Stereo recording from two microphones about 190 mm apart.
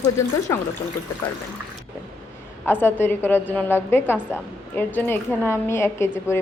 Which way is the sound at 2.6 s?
10° left (ahead or behind).